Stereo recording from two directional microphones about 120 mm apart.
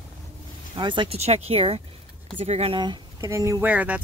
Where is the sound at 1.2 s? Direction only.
60° right (ahead or behind).